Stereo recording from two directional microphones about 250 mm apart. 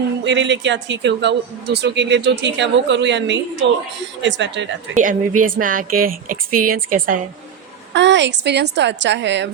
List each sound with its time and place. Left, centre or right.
0.3 s a man's voice: right
5.4 s a woman's voice: right
7.9 s a man's voice: right